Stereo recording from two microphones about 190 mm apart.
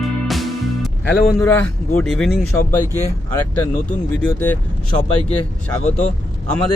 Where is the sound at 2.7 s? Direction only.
10° left (ahead or behind).